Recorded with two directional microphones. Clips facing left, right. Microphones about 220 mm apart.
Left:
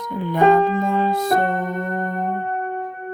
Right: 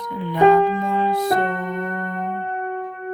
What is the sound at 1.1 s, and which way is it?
Music, 45° left (ahead or behind).